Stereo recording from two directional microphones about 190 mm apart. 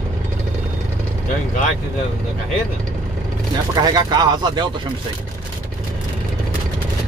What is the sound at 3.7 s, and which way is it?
Speech, 20° right (ahead or behind).